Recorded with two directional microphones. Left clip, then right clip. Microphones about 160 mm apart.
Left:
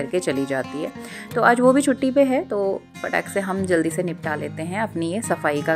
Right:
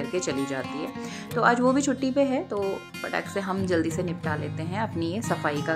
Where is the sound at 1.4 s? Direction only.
35° left (ahead or behind).